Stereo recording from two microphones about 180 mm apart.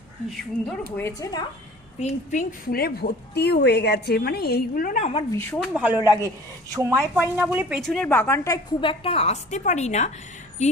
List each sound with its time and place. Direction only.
0.9 s a woman's voice: 15° left (ahead or behind)
2.0 s a woman's voice: 40° left (ahead or behind)
5.3 s a woman's voice: 15° left (ahead or behind)
5.5 s a woman's voice: centre (ahead or behind); by 8.5 s 15° left (ahead or behind)
8.8 s a woman's voice: 30° left (ahead or behind)